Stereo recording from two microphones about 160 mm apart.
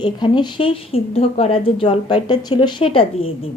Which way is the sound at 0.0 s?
30° left (ahead or behind).